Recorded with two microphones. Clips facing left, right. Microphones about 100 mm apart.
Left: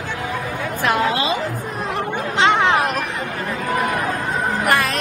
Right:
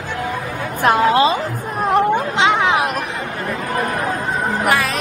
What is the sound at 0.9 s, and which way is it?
Speech, 40° right (ahead or behind).